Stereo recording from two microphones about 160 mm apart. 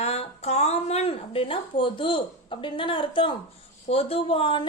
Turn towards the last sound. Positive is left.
turn(degrees=35)  # may be behind; listen again after turning